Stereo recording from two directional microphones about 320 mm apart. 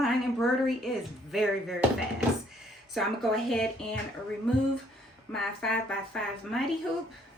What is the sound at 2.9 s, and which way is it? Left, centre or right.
Speech, centre.